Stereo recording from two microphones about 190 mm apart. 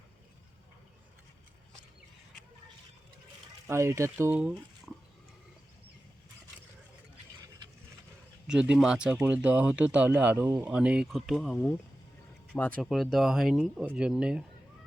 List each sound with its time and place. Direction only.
3.7 s speech: 15° right (ahead or behind)
8.4 s speech: 5° right (ahead or behind)